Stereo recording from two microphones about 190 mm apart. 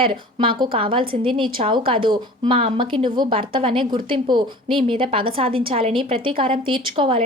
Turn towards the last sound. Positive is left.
turn(degrees=-30)  # may be behind; listen again after turning